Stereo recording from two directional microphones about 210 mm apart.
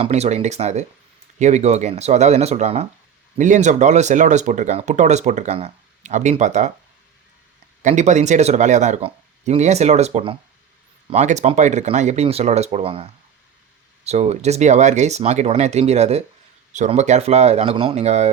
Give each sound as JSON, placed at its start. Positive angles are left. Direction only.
{"t": 0.0, "sound": "speech", "side_deg": -30}
{"t": 7.8, "sound": "speech", "side_deg": -35}